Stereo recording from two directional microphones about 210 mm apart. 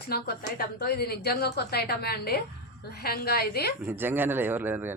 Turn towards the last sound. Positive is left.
turn(degrees=-10)  # may be behind; listen again after turning